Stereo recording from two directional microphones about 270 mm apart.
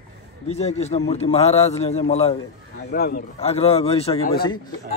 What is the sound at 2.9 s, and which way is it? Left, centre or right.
A man's voice, left.